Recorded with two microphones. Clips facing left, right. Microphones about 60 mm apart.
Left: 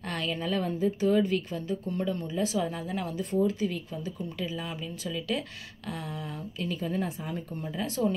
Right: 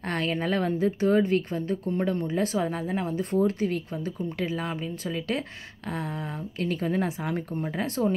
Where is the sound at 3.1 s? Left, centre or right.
Right.